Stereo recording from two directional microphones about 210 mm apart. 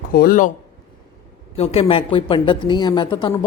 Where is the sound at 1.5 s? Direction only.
30° left (ahead or behind).